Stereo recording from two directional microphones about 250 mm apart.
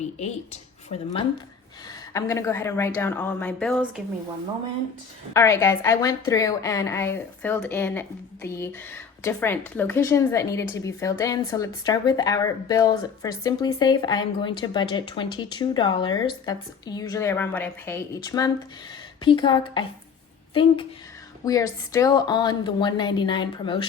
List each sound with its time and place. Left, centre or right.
0.2 s speech: left
2.1 s speech: centre
5.3 s a woman's voice: centre